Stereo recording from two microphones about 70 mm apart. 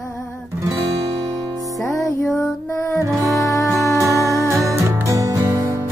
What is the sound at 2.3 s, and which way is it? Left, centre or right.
Female singing, left.